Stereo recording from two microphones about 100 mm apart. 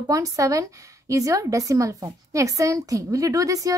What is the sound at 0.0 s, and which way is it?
A woman's voice, 35° right (ahead or behind).